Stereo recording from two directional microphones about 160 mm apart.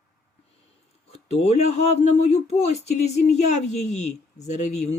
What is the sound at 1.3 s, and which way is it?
A man's voice, 45° left (ahead or behind).